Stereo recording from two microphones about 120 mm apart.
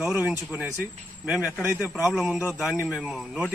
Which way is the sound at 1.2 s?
10° right (ahead or behind).